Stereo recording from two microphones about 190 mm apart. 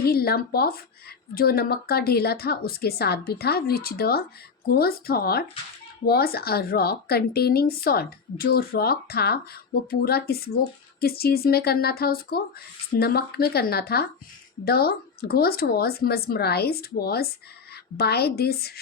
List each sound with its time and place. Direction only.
0.0 s a woman's voice: 55° left (ahead or behind)